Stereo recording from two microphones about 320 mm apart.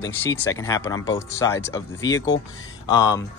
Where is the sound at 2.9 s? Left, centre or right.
Centre.